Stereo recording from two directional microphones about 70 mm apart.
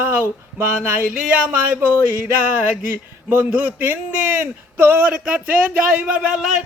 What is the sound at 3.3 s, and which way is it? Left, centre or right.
A man's voice, right.